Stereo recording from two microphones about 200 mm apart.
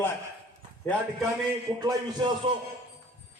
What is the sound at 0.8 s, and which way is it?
Speech, 10° left (ahead or behind).